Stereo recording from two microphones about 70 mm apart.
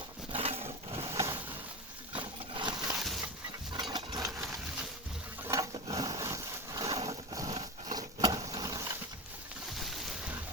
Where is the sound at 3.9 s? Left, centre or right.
Right.